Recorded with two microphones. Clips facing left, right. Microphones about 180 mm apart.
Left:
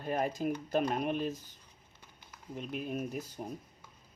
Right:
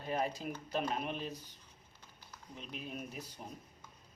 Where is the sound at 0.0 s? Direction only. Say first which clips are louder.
Left 4 dB; 50° left (ahead or behind).